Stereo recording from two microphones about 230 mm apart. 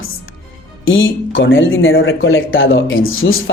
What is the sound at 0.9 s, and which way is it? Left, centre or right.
Speech, left.